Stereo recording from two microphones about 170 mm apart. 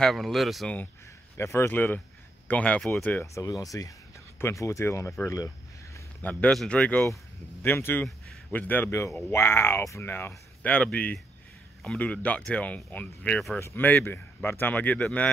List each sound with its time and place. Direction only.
0.0 s speech: centre (ahead or behind)
1.3 s speech: 15° left (ahead or behind)
6.2 s speech: 5° left (ahead or behind)